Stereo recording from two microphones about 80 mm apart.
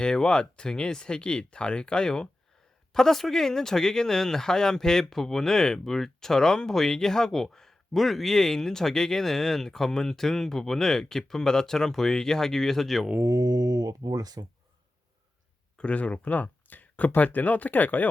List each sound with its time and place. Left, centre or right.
0.0 s speech: centre
13.2 s speech: right
15.8 s speech: centre